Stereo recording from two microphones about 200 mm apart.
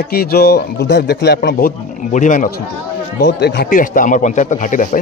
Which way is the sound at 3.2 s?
60° left (ahead or behind).